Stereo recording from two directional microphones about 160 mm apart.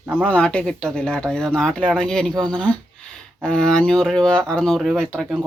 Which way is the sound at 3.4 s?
5° left (ahead or behind).